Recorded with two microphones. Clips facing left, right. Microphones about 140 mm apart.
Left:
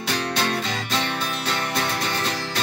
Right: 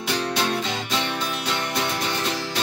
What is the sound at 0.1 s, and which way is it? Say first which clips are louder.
Music: right 1 dB; 15° right (ahead or behind).